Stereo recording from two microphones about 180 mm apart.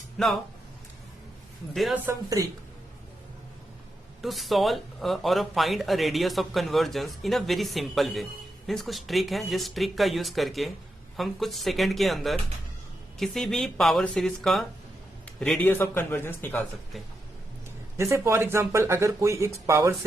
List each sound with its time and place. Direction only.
0.2 s a man's voice: centre (ahead or behind)
1.7 s a man's voice: centre (ahead or behind)
4.2 s a man's voice: centre (ahead or behind)
17.9 s speech: 15° right (ahead or behind)